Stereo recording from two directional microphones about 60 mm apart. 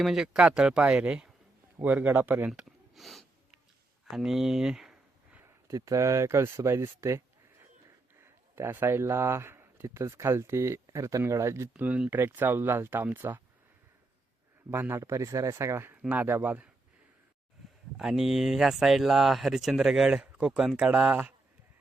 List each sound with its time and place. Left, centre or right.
0.0 s speech: centre; by 2.5 s right
2.6 s a sound: centre
4.0 s speech: centre
5.7 s speech: right
8.2 s a sound: right
9.8 s speech: right
10.8 s speech: right
11.3 s speech: right
11.8 s speech: right
12.1 s speech: right
14.7 s speech: right
16.0 s speech: right
17.9 s speech: centre